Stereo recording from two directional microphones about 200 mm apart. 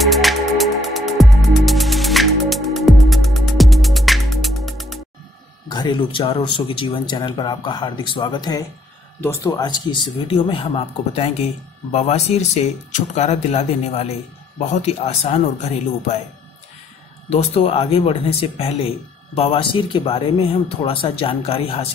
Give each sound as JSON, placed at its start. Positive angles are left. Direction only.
{"t": 0.0, "sound": "music", "side_deg": 0}
{"t": 5.7, "sound": "speech", "side_deg": 20}
{"t": 17.3, "sound": "speech", "side_deg": 30}